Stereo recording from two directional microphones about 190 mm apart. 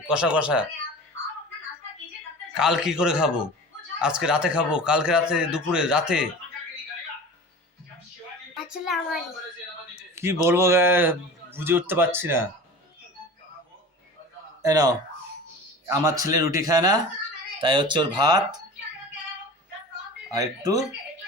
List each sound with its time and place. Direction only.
0.1 s a man's voice: 5° right (ahead or behind)
2.6 s a man's voice: 5° right (ahead or behind)
8.5 s a sound: 5° right (ahead or behind)
9.9 s a man's voice: 15° right (ahead or behind)
14.6 s a man's voice: 20° right (ahead or behind)
20.3 s a man's voice: 20° right (ahead or behind)